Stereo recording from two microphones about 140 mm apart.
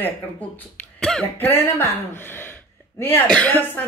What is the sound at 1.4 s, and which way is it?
Speech, 15° left (ahead or behind).